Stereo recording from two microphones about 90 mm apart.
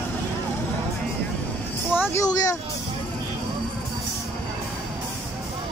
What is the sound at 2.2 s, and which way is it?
Speech, 45° left (ahead or behind).